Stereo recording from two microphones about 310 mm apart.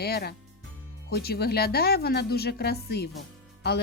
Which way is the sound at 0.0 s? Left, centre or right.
Left.